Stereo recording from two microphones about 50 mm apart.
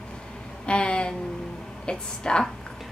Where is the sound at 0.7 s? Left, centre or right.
Left.